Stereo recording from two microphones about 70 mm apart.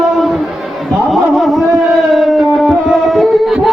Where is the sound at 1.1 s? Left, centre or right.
Centre.